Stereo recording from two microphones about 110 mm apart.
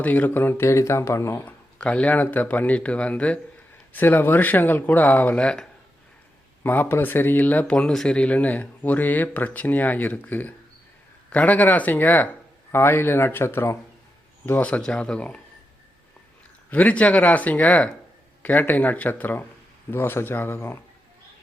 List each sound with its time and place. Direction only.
0.0 s speech: 15° left (ahead or behind)
1.5 s speech: 10° left (ahead or behind)
6.6 s speech: 20° left (ahead or behind)
16.6 s speech: 15° left (ahead or behind)